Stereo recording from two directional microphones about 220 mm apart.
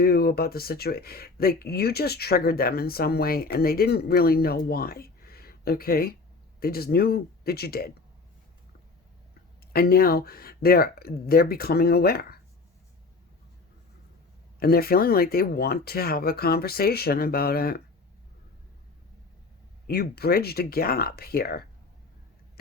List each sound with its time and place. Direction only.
0.0 s speech: 45° left (ahead or behind)
9.7 s speech: 45° left (ahead or behind)
14.6 s speech: 45° left (ahead or behind)
19.9 s speech: 45° left (ahead or behind)